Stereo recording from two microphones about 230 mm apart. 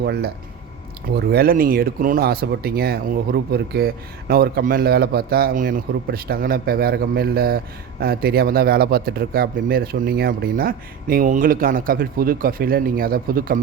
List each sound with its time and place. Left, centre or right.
0.0 s speech: right
1.3 s speech: right